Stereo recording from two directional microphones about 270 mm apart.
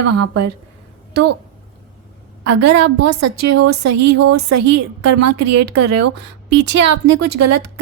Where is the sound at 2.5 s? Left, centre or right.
Right.